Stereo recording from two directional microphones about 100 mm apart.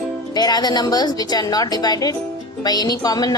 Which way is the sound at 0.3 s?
45° left (ahead or behind).